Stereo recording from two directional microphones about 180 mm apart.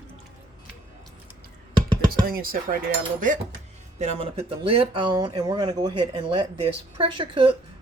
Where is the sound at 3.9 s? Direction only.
35° right (ahead or behind).